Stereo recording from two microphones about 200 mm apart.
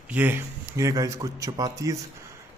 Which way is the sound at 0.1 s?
10° right (ahead or behind).